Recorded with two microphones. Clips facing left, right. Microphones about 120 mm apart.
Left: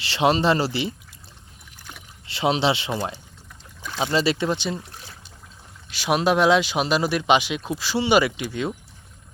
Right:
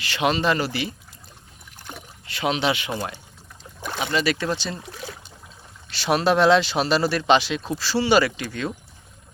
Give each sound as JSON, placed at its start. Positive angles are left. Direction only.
{"t": 0.0, "sound": "speech", "side_deg": 25}
{"t": 2.2, "sound": "speech", "side_deg": 25}
{"t": 4.9, "sound": "a sound", "side_deg": -85}
{"t": 5.9, "sound": "speech", "side_deg": 10}